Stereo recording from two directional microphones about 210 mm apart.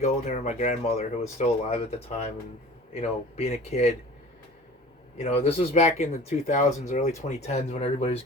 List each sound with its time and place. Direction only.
0.0 s speech: 35° left (ahead or behind)
5.1 s speech: 30° left (ahead or behind)